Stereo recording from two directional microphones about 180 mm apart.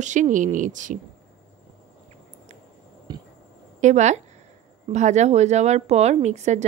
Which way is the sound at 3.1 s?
25° right (ahead or behind).